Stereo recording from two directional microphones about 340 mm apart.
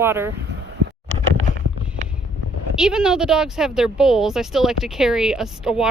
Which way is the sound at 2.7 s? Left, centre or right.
Centre.